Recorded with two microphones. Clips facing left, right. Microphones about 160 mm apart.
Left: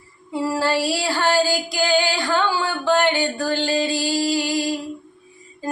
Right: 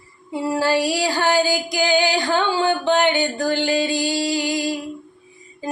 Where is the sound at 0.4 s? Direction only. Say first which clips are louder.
Right 2 dB; 15° right (ahead or behind).